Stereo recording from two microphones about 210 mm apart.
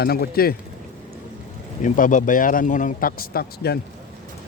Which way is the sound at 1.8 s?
35° left (ahead or behind).